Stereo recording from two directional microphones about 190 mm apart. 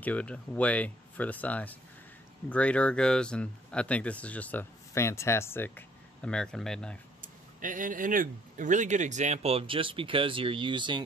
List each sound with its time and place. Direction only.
0.0 s speech: 5° left (ahead or behind)
7.2 s speech: 45° right (ahead or behind); by 11.0 s 25° right (ahead or behind)